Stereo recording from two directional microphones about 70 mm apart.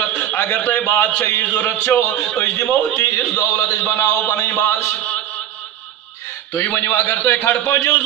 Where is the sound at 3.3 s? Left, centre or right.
Left.